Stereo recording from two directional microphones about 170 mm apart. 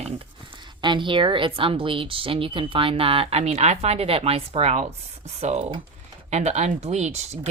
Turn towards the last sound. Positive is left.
turn(degrees=-40)  # may be behind; listen again after turning